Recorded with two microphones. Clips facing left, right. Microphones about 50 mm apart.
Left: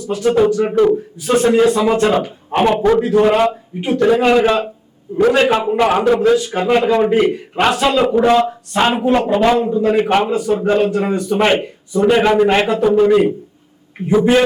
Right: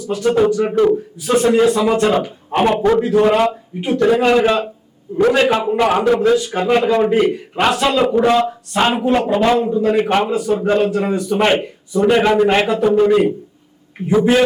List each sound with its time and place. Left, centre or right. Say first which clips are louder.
0.0 s a man's voice: left 1 dB; centre